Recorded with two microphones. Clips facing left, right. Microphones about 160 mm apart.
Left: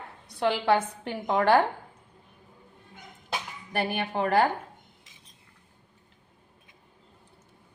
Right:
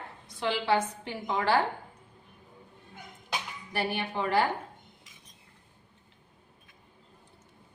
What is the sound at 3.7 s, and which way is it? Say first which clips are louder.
Speech: left 3 dB; 50° left (ahead or behind).